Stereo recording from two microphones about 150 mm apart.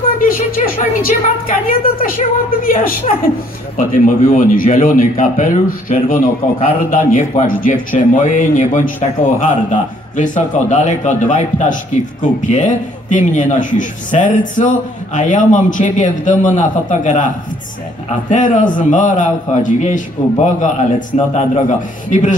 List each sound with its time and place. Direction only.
0.2 s a woman's voice: 70° left (ahead or behind); by 17.3 s 55° left (ahead or behind)
18.3 s a man's voice: 60° left (ahead or behind)